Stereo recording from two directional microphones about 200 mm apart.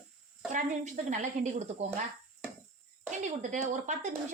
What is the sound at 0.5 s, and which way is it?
Speech, 40° right (ahead or behind).